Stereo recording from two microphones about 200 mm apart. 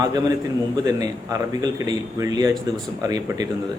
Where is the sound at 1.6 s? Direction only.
20° right (ahead or behind).